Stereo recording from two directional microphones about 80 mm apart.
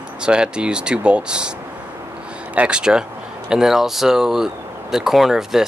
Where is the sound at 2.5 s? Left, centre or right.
Centre.